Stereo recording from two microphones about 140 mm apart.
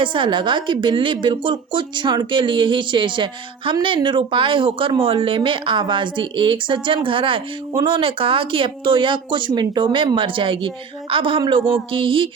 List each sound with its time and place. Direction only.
0.0 s speech: 35° right (ahead or behind)